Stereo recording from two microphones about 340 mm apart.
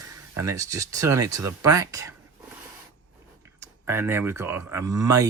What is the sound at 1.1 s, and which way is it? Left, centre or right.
Speech, right.